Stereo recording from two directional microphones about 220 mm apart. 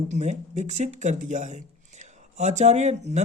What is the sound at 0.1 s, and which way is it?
Speech, 30° right (ahead or behind).